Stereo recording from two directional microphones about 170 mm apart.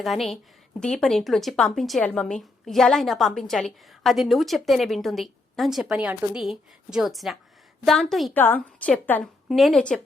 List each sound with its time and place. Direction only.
0.0 s a woman's voice: centre (ahead or behind)